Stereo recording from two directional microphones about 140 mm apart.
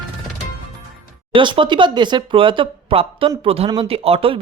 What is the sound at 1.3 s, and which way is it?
Speech, 35° right (ahead or behind).